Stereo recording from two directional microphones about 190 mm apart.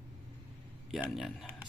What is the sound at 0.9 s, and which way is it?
Speech, centre (ahead or behind).